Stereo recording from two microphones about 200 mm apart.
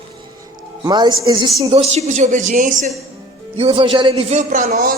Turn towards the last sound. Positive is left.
turn(degrees=-45)  # may be behind; listen again after turning